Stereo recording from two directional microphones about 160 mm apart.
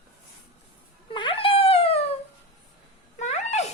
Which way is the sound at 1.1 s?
30° left (ahead or behind).